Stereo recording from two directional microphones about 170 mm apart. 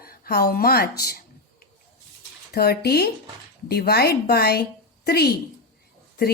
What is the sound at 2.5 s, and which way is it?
A woman's voice, 65° left (ahead or behind).